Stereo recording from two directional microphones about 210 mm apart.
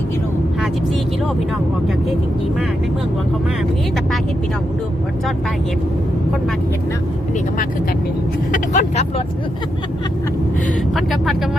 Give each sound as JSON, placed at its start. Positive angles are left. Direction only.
{"t": 8.5, "sound": "speech", "side_deg": 35}
{"t": 10.9, "sound": "speech", "side_deg": 0}